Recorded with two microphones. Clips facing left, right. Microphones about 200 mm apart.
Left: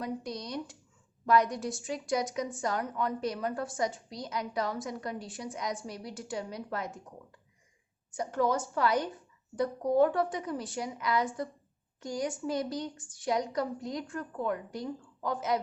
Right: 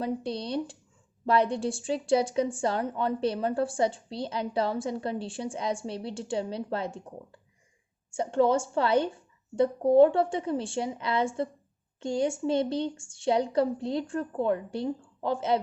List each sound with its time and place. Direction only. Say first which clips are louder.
0.0 s a woman's voice: right 5 dB; 30° right (ahead or behind)